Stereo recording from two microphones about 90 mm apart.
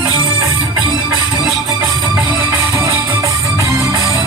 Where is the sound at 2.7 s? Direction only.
30° right (ahead or behind).